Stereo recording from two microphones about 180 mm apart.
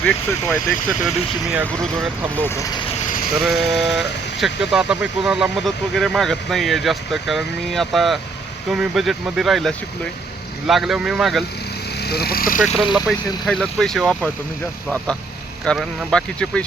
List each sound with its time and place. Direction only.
0.0 s speech: 10° left (ahead or behind)
2.4 s speech: 15° left (ahead or behind)
3.4 s speech: centre (ahead or behind)
11.9 s speech: 60° left (ahead or behind)
12.8 s speech: centre (ahead or behind)
15.6 s speech: centre (ahead or behind)